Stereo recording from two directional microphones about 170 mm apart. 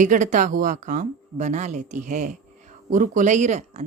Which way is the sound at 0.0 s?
45° right (ahead or behind).